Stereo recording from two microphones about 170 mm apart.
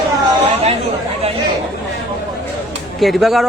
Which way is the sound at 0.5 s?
35° right (ahead or behind).